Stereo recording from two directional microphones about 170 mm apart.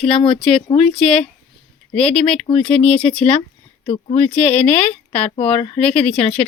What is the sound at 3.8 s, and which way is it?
Speech, 40° left (ahead or behind).